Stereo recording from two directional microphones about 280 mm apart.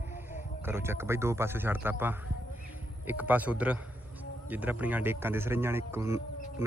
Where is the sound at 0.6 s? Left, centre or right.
Centre.